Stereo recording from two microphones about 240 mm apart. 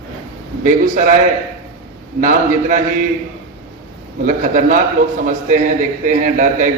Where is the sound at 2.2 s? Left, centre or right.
Right.